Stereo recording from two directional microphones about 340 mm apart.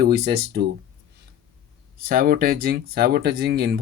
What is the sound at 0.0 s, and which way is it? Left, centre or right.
Speech, right.